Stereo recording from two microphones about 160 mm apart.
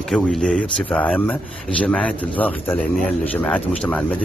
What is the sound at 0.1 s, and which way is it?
A man's voice, 5° left (ahead or behind).